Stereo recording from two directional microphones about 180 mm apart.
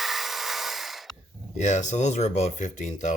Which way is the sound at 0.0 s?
Centre (ahead or behind).